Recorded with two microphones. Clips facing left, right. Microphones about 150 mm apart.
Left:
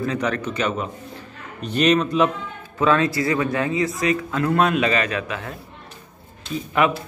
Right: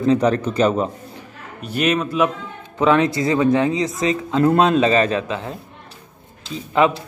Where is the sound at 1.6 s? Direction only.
10° right (ahead or behind).